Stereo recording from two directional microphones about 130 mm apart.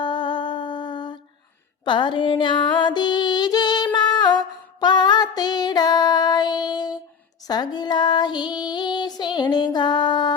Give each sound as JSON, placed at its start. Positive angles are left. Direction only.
{"t": 0.0, "sound": "music", "side_deg": 40}
{"t": 3.9, "sound": "a sound", "side_deg": 35}
{"t": 4.8, "sound": "music", "side_deg": 35}
{"t": 7.4, "sound": "female singing", "side_deg": 30}